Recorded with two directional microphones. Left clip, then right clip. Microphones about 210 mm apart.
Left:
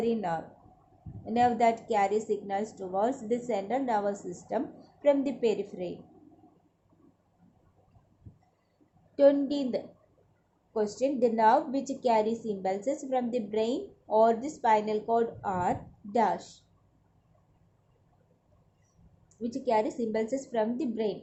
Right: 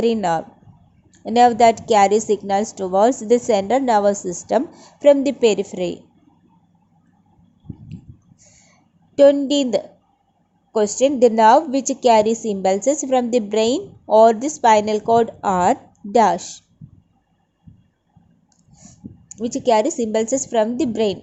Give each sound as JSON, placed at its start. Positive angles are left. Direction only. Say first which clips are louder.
{"t": 0.0, "sound": "a woman's voice", "louder": "right 12 dB", "side_deg": -35}
{"t": 9.1, "sound": "a woman's voice", "louder": "right 10 dB", "side_deg": -30}
{"t": 19.3, "sound": "a woman's voice", "louder": "right 11 dB", "side_deg": -30}